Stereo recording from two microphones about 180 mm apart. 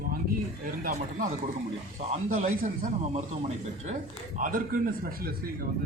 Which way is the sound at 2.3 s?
50° right (ahead or behind).